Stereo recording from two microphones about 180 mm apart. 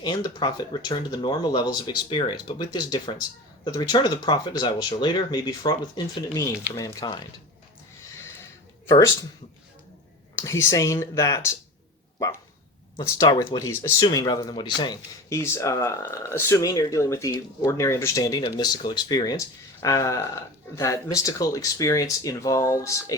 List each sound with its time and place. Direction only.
0.0 s speech: 25° left (ahead or behind)
10.3 s speech: 15° left (ahead or behind)
13.0 s speech: 20° left (ahead or behind)